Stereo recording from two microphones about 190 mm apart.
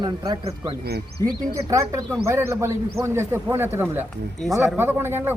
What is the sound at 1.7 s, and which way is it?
A man's voice, 15° right (ahead or behind).